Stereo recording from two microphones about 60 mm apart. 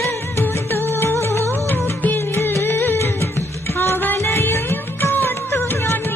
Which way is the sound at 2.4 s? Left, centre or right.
Left.